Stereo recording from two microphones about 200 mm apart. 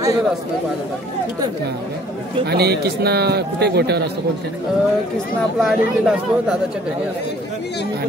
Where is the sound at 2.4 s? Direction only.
50° right (ahead or behind).